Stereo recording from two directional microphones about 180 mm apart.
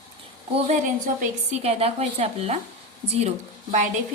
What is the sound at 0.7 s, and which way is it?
A woman's voice, 40° right (ahead or behind).